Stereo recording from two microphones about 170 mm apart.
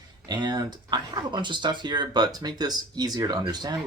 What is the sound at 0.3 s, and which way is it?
Speech, 25° right (ahead or behind).